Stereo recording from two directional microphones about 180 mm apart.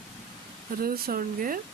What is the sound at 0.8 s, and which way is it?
Speech, 55° right (ahead or behind).